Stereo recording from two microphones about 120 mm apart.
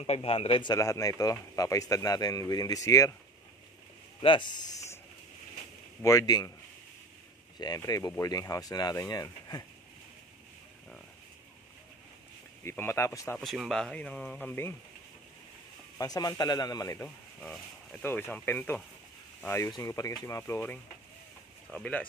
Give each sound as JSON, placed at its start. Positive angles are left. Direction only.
{"t": 0.0, "sound": "speech", "side_deg": 55}
{"t": 0.7, "sound": "speech", "side_deg": 30}
{"t": 4.2, "sound": "a sound", "side_deg": 45}
{"t": 6.0, "sound": "speech", "side_deg": 30}
{"t": 7.5, "sound": "speech", "side_deg": 35}
{"t": 12.6, "sound": "speech", "side_deg": 20}
{"t": 13.4, "sound": "speech", "side_deg": 0}
{"t": 16.0, "sound": "speech", "side_deg": 30}
{"t": 18.0, "sound": "speech", "side_deg": 15}